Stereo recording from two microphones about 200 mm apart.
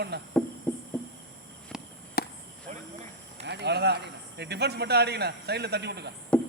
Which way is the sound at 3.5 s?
60° right (ahead or behind).